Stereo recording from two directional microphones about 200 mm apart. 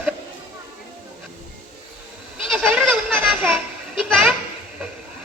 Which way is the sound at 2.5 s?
5° right (ahead or behind).